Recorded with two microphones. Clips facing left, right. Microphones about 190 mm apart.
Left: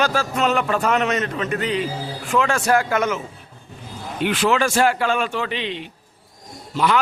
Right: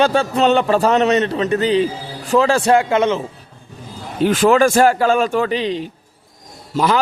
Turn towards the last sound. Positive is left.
turn(degrees=-40)  # may be behind; listen again after turning